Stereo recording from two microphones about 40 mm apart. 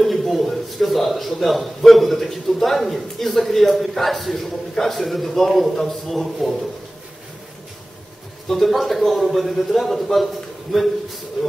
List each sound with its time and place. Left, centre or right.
0.0 s a man's voice: centre
8.5 s a man's voice: centre
11.4 s a man's voice: centre